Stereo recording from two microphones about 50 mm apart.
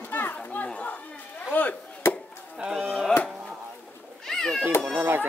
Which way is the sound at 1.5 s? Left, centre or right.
Left.